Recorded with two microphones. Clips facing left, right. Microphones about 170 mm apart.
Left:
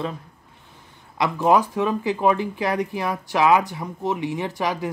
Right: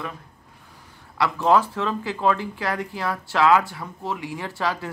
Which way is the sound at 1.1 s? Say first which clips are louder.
Left 1 dB; 15° left (ahead or behind).